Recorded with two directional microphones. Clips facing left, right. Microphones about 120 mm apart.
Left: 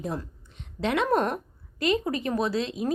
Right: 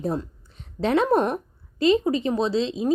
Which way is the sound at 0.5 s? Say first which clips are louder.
Right 5 dB; 35° right (ahead or behind).